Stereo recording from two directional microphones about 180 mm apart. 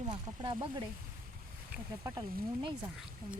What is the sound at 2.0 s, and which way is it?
Speech, 20° right (ahead or behind).